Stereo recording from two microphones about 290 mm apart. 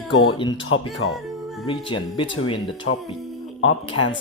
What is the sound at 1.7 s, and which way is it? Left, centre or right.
Speech, centre.